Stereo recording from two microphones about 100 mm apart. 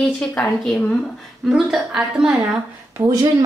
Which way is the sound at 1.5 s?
5° right (ahead or behind).